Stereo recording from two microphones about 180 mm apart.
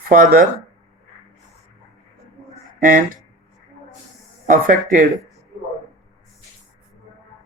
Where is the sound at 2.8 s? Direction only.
50° right (ahead or behind).